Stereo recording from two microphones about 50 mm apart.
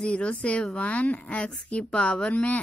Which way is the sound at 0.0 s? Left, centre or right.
Left.